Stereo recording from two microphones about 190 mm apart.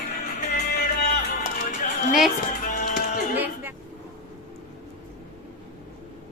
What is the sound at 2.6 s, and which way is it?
Music, 45° left (ahead or behind).